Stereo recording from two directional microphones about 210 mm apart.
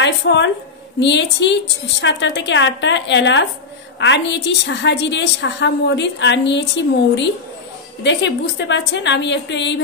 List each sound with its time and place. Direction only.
0.0 s a woman's voice: 55° left (ahead or behind)
8.0 s a woman's voice: 55° left (ahead or behind)